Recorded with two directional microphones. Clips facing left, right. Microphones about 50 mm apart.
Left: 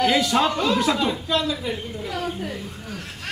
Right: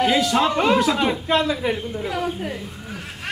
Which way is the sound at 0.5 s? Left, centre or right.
Right.